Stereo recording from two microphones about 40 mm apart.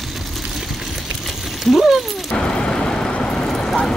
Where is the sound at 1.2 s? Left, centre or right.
Centre.